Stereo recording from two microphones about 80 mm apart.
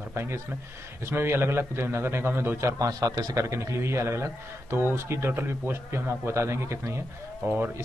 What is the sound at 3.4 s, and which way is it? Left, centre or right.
Speech, right.